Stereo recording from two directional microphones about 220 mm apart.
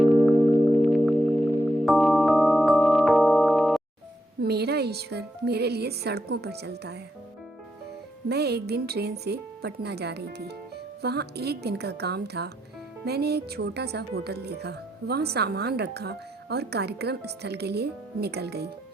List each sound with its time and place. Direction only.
0.0 s music: centre (ahead or behind)
4.4 s speech: 45° right (ahead or behind)
8.3 s speech: 50° right (ahead or behind)